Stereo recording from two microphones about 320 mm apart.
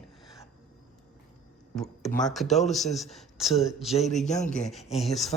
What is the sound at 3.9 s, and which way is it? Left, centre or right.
Speech, centre.